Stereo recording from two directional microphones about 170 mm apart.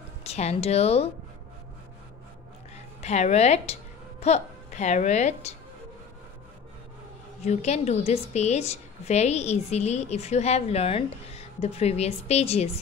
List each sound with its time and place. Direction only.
0.2 s a woman's voice: 40° left (ahead or behind)
3.0 s a woman's voice: 40° left (ahead or behind)
7.4 s a woman's voice: 40° left (ahead or behind)